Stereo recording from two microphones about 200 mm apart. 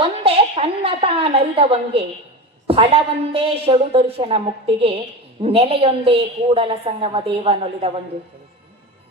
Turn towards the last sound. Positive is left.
turn(degrees=-30)  # may be behind; listen again after turning